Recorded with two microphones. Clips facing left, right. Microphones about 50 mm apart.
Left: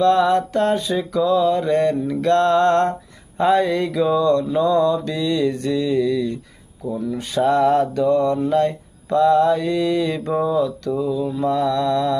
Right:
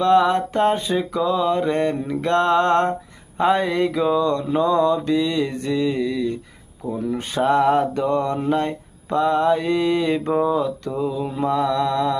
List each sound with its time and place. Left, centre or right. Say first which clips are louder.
0.0 s mantra: left 1 dB; centre
3.3 s speech: left 2 dB; centre
4.5 s mantra: left 1 dB; right
6.9 s speech: left 1 dB; right
7.4 s mantra: left 1 dB; right
11.2 s speech: left 2 dB; right
11.4 s speech: even; centre